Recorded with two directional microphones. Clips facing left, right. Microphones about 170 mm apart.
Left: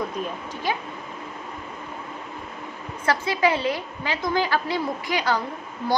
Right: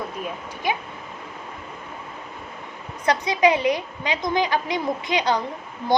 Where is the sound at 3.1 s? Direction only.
15° right (ahead or behind).